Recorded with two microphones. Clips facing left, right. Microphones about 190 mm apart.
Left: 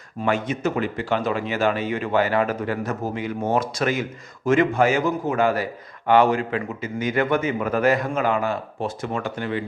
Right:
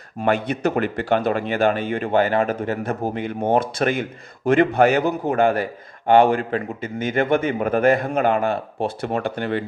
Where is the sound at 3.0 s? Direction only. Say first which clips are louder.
Right 4 dB; 60° right (ahead or behind).